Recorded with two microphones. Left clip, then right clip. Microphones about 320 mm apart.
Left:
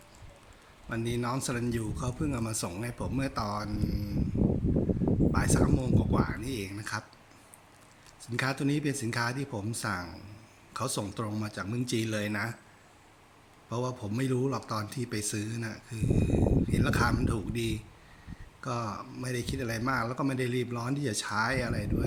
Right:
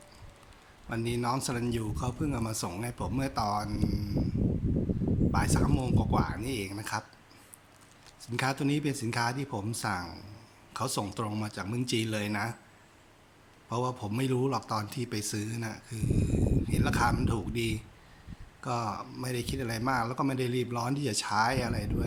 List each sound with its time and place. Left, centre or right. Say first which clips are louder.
0.9 s a man's voice: right 2 dB; centre
5.3 s a man's voice: left 1 dB; centre
8.2 s a man's voice: even; centre
13.7 s a man's voice: right 2 dB; centre
16.3 s speech: left 5 dB; left
16.6 s a man's voice: even; centre